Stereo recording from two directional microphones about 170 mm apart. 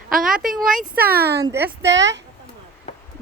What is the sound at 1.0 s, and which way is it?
Speech, 65° right (ahead or behind).